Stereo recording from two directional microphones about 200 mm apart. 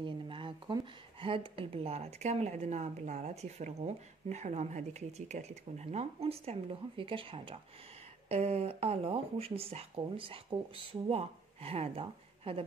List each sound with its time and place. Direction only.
0.0 s speech: 25° right (ahead or behind)